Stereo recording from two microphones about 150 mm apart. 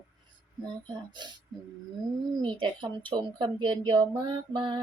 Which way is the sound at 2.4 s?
35° right (ahead or behind).